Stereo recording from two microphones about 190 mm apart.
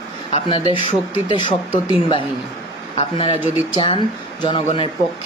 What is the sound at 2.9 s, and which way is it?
Speech, 25° left (ahead or behind).